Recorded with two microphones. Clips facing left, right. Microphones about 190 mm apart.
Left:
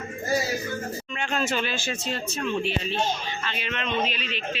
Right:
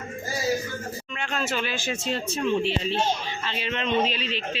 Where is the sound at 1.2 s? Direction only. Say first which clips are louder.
Left 1 dB; centre (ahead or behind).